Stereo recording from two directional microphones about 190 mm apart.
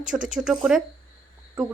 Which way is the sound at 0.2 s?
40° right (ahead or behind).